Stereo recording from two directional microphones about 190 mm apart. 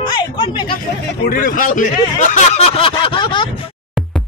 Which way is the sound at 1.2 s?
50° left (ahead or behind).